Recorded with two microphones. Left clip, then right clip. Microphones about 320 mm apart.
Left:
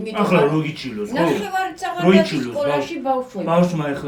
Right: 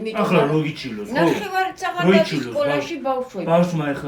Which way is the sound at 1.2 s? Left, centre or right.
Right.